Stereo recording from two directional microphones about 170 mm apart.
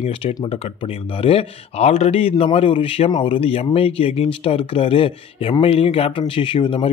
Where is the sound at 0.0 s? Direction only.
45° left (ahead or behind).